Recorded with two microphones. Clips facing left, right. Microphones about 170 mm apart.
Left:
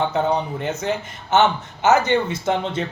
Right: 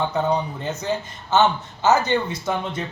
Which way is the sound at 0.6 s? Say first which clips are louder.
Left 2 dB; 20° left (ahead or behind).